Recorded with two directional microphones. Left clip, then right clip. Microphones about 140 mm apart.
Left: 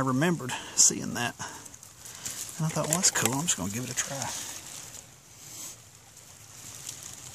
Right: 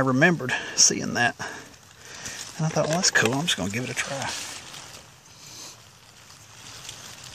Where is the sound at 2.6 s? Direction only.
20° right (ahead or behind).